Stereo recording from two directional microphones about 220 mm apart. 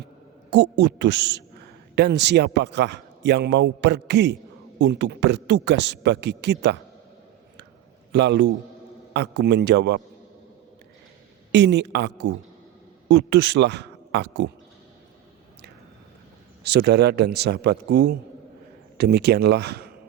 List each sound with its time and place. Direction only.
0.5 s a man's voice: 50° right (ahead or behind)
8.1 s a man's voice: 50° right (ahead or behind)
11.5 s a man's voice: 50° right (ahead or behind)
16.6 s a man's voice: 50° right (ahead or behind)